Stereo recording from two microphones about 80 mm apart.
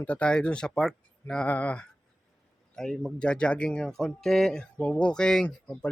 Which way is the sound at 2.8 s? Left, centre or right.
Centre.